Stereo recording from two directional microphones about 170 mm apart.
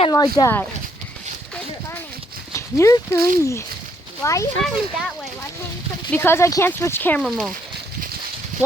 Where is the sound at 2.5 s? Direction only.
20° left (ahead or behind).